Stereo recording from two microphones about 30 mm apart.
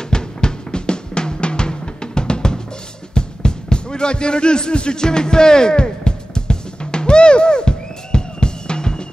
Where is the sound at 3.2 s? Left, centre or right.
Left.